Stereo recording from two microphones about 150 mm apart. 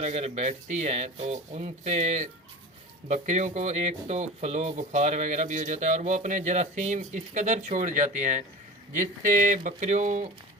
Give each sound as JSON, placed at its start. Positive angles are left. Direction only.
{"t": 0.0, "sound": "speech", "side_deg": -45}